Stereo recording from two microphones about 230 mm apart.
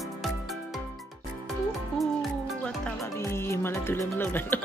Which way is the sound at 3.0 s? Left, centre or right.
Centre.